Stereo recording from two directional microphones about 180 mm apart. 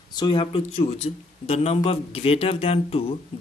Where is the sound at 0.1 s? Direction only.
25° left (ahead or behind).